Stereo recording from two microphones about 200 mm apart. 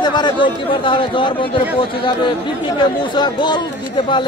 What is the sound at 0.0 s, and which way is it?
Speech, 20° left (ahead or behind).